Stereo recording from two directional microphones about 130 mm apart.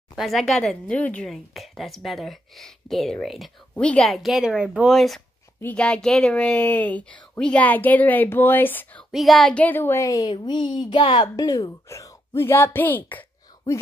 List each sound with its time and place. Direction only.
0.1 s a woman's voice: centre (ahead or behind); by 9.0 s 15° left (ahead or behind)
9.1 s a woman's voice: centre (ahead or behind)